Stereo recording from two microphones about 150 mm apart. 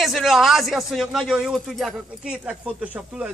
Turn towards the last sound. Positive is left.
turn(degrees=-10)  # may be behind; listen again after turning